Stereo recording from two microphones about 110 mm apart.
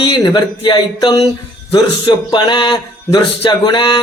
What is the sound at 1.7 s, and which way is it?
Mantra, 40° left (ahead or behind).